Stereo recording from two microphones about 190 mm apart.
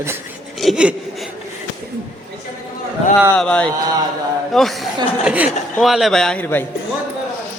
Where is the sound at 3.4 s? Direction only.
5° left (ahead or behind).